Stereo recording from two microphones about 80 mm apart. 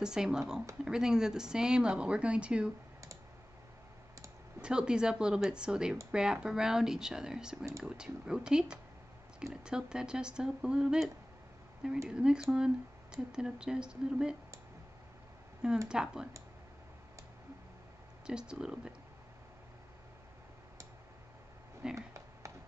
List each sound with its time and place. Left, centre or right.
0.0 s speech: centre
4.6 s speech: centre
12.1 s speech: centre
15.9 s speech: centre
18.2 s speech: centre
21.9 s a sound: right